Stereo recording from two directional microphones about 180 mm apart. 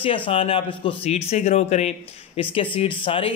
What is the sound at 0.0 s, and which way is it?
Speech, 30° left (ahead or behind).